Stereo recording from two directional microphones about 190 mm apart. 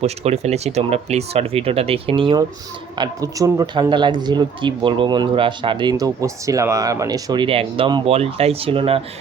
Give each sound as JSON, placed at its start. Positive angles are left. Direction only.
{"t": 0.0, "sound": "speech", "side_deg": -35}
{"t": 3.0, "sound": "speech", "side_deg": -15}